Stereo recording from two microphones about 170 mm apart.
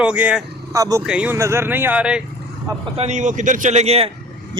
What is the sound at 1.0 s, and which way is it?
Speech, 5° right (ahead or behind).